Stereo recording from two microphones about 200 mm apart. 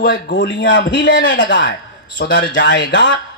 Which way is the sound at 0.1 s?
65° left (ahead or behind).